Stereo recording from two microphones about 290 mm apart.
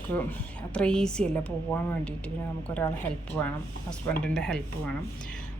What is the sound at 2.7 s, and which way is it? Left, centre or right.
A woman's voice, centre.